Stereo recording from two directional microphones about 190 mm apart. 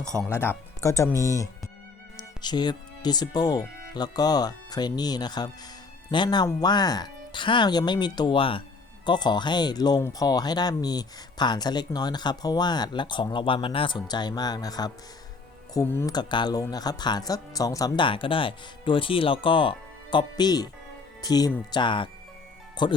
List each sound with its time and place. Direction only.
0.2 s speech: 10° left (ahead or behind)